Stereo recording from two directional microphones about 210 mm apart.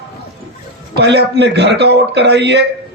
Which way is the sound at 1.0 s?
50° right (ahead or behind).